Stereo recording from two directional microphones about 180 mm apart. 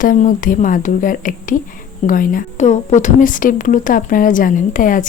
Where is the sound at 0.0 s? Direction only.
50° left (ahead or behind).